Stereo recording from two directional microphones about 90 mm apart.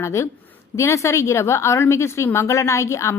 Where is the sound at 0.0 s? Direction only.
35° left (ahead or behind).